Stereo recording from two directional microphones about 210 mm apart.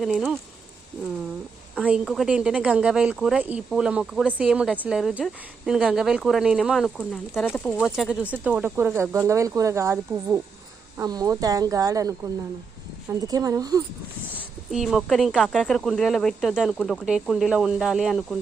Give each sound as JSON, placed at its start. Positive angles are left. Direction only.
{"t": 0.0, "sound": "speech", "side_deg": 0}
{"t": 1.7, "sound": "speech", "side_deg": -5}
{"t": 14.3, "sound": "speech", "side_deg": 0}